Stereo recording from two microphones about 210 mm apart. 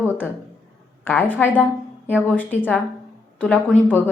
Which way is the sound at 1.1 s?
10° left (ahead or behind).